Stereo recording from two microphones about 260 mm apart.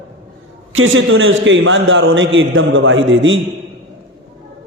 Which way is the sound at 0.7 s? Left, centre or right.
Right.